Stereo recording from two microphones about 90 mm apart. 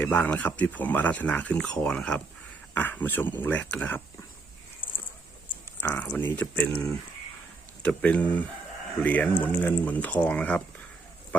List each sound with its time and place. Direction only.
0.0 s speech: 20° left (ahead or behind)
5.9 s speech: 20° left (ahead or behind)
7.8 s speech: 15° left (ahead or behind)